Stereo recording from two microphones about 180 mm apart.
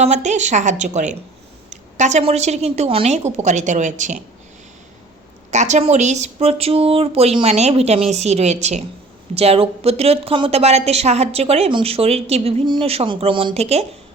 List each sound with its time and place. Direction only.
0.0 s a woman's voice: 40° right (ahead or behind)
5.5 s a woman's voice: 40° right (ahead or behind)